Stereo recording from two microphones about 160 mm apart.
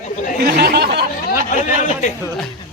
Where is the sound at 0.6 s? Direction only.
85° right.